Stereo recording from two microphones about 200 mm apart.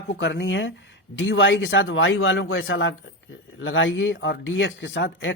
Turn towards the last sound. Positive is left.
turn(degrees=65)  # may be behind; listen again after turning